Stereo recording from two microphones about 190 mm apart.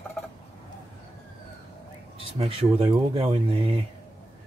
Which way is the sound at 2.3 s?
30° right (ahead or behind).